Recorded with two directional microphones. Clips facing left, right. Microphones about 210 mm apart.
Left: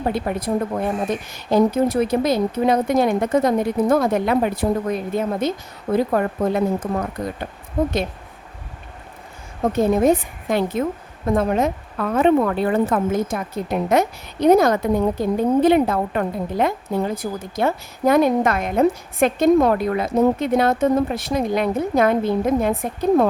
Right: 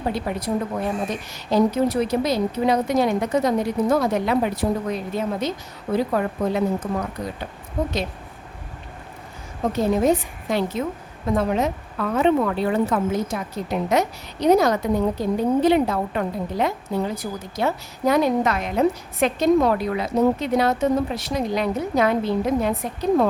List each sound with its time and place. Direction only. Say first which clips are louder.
0.1 s a woman's voice: left 1 dB; 55° left (ahead or behind)
9.7 s a woman's voice: left 3 dB; 50° left (ahead or behind)